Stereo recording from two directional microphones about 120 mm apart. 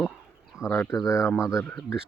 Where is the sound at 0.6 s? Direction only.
20° left (ahead or behind).